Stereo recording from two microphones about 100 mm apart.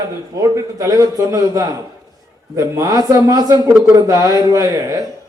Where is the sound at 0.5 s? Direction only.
35° right (ahead or behind).